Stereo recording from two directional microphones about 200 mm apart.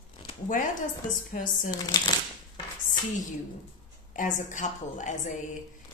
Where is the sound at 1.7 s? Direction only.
20° left (ahead or behind).